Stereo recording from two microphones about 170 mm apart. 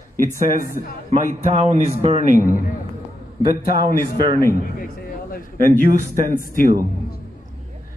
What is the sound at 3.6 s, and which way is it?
Speech, 60° left (ahead or behind).